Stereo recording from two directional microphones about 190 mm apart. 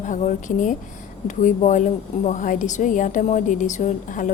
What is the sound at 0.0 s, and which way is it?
A woman's voice, 40° left (ahead or behind).